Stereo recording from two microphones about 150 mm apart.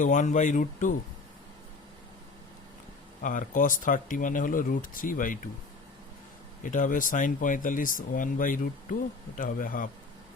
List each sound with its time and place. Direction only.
0.0 s speech: 55° left (ahead or behind)
3.2 s speech: 60° left (ahead or behind)
6.6 s speech: 60° left (ahead or behind)